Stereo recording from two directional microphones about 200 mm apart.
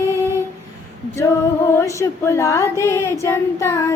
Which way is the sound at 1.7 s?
15° left (ahead or behind).